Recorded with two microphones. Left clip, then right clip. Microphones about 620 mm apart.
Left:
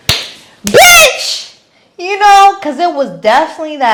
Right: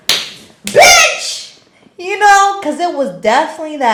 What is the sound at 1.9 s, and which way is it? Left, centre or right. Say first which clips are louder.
A woman's voice: left 3 dB; left.